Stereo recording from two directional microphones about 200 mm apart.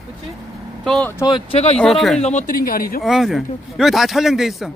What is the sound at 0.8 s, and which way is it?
Speech, centre (ahead or behind).